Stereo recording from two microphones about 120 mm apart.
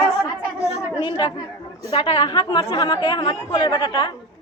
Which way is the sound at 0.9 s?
40° left (ahead or behind).